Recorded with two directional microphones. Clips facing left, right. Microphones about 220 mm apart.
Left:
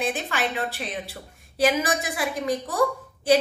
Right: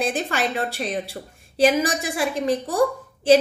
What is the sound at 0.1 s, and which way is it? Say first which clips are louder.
Speech: right 3 dB; 40° right (ahead or behind).